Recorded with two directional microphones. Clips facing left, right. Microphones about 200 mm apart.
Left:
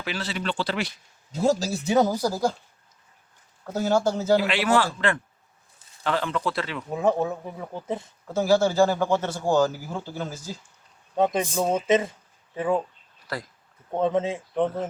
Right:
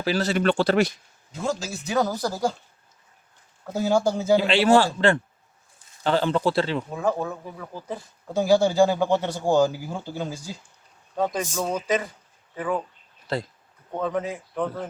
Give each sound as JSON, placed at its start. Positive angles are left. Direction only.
{"t": 0.0, "sound": "speech", "side_deg": -40}
{"t": 1.3, "sound": "speech", "side_deg": 35}
{"t": 1.9, "sound": "speech", "side_deg": 20}
{"t": 3.7, "sound": "a man's voice", "side_deg": -10}
{"t": 4.4, "sound": "a man's voice", "side_deg": -30}
{"t": 6.9, "sound": "speech", "side_deg": 20}
{"t": 8.3, "sound": "a man's voice", "side_deg": -15}
{"t": 11.2, "sound": "speech", "side_deg": 25}
{"t": 13.2, "sound": "speech", "side_deg": -25}
{"t": 14.0, "sound": "speech", "side_deg": 25}